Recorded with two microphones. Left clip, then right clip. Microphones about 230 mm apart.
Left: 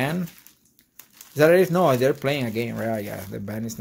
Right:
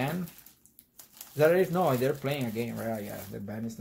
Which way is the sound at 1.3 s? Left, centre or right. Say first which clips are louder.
Left 7 dB; left.